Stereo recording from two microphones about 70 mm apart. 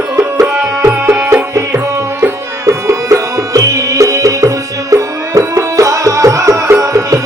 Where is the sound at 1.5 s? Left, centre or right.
Right.